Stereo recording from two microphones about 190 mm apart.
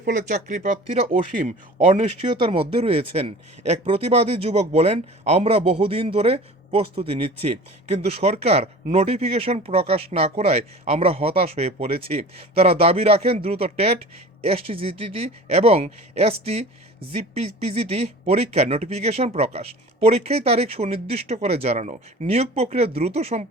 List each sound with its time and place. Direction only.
0.0 s speech: 45° right (ahead or behind)
2.5 s speech: 30° right (ahead or behind)